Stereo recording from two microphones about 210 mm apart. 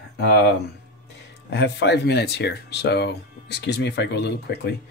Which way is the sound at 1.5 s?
55° left (ahead or behind).